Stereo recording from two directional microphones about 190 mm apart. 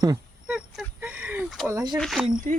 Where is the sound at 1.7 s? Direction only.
20° right (ahead or behind).